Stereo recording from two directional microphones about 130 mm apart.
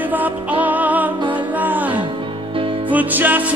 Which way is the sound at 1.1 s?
40° right (ahead or behind).